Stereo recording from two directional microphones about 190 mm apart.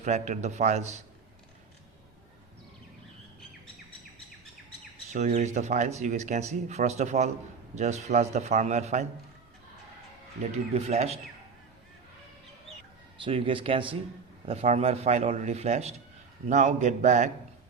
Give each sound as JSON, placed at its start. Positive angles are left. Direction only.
{"t": 0.0, "sound": "speech", "side_deg": -40}
{"t": 5.1, "sound": "speech", "side_deg": -35}
{"t": 10.8, "sound": "speech", "side_deg": -35}
{"t": 13.1, "sound": "speech", "side_deg": -25}